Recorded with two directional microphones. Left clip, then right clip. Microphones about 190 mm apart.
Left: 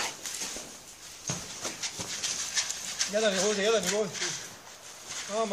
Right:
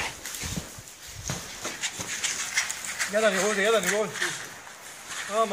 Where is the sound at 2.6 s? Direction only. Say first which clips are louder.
Right 4 dB; 30° left (ahead or behind).